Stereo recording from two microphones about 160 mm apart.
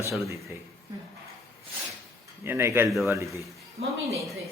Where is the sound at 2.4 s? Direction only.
15° right (ahead or behind).